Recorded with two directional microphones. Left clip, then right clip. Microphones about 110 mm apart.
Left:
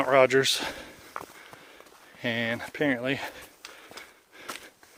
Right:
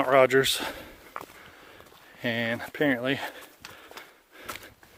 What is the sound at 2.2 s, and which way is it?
Speech, 35° right (ahead or behind).